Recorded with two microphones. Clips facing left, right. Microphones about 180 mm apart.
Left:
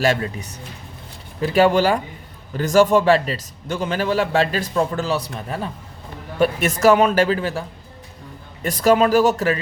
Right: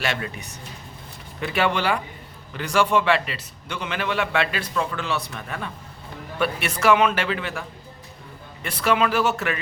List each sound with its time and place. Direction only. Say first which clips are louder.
0.0 s a man's voice: left 8 dB; 40° left (ahead or behind)
1.4 s a man's voice: left 8 dB; 40° left (ahead or behind)
8.6 s a man's voice: left 6 dB; 40° left (ahead or behind)